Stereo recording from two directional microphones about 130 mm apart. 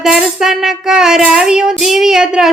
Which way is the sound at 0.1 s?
5° right (ahead or behind).